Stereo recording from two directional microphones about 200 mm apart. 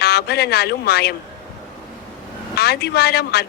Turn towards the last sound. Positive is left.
turn(degrees=55)  # may be behind; listen again after turning